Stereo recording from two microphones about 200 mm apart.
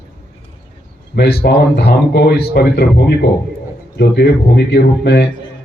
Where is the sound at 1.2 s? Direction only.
55° left (ahead or behind).